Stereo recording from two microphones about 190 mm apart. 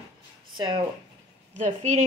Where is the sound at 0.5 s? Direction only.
25° right (ahead or behind).